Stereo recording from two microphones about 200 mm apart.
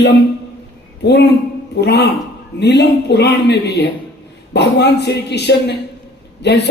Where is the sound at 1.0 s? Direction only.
55° left (ahead or behind).